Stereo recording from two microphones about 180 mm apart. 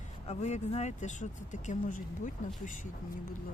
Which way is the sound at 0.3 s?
40° left (ahead or behind).